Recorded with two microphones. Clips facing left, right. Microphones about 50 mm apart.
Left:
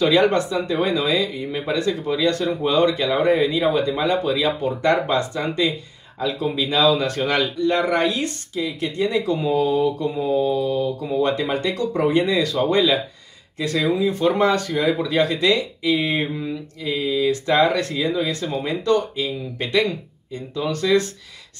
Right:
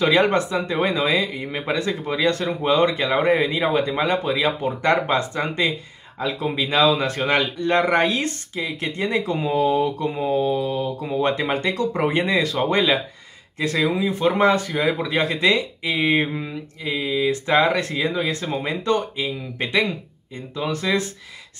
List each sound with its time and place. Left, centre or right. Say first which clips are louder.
0.0 s speech: left 1 dB; right